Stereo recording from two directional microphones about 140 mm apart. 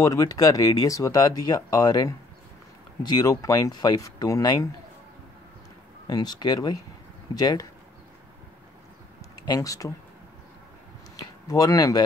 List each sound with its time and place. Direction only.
0.0 s speech: 25° left (ahead or behind)
6.0 s speech: 30° left (ahead or behind)
9.5 s speech: 25° left (ahead or behind)
11.4 s speech: 25° left (ahead or behind)